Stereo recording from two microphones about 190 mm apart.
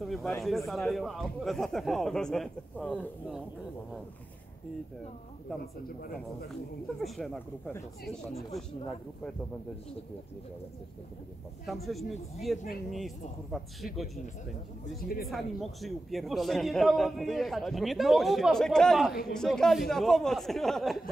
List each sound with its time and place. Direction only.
0.0 s a man's voice: centre (ahead or behind)
5.9 s speech: 50° left (ahead or behind)
6.1 s a man's voice: centre (ahead or behind)
11.6 s a man's voice: centre (ahead or behind)
15.0 s speech: 50° left (ahead or behind)
15.2 s a man's voice: centre (ahead or behind)